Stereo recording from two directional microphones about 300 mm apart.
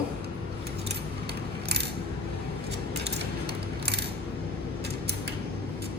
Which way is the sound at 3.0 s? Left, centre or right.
Right.